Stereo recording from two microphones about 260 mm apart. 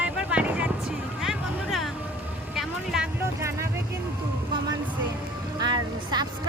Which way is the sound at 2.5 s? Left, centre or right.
Centre.